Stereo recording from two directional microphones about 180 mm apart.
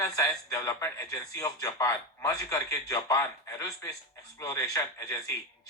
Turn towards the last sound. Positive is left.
turn(degrees=20)  # may be behind; listen again after turning